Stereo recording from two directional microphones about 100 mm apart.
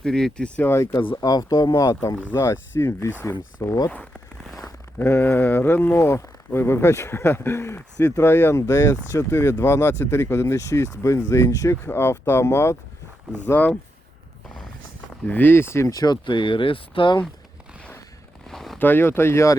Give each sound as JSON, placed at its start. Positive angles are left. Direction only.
{"t": 0.0, "sound": "speech", "side_deg": 5}
{"t": 1.1, "sound": "speech", "side_deg": 40}
{"t": 1.9, "sound": "speech", "side_deg": 30}
{"t": 3.6, "sound": "speech", "side_deg": 35}
{"t": 4.9, "sound": "speech", "side_deg": 25}
{"t": 8.2, "sound": "speech", "side_deg": 20}
{"t": 15.3, "sound": "speech", "side_deg": 20}
{"t": 16.2, "sound": "speech", "side_deg": 55}
{"t": 18.4, "sound": "a sound", "side_deg": 0}
{"t": 18.8, "sound": "speech", "side_deg": 20}